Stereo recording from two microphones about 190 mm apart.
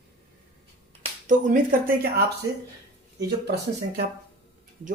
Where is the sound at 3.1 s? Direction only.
60° right (ahead or behind).